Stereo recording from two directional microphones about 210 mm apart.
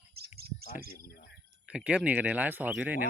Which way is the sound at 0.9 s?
50° left (ahead or behind).